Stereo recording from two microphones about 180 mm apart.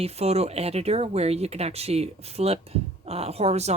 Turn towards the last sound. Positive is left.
turn(degrees=-35)  # may be behind; listen again after turning